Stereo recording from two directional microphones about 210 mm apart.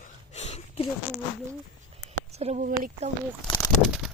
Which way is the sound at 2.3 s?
30° right (ahead or behind).